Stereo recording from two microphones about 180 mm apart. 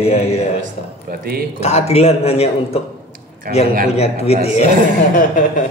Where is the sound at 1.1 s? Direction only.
55° right (ahead or behind).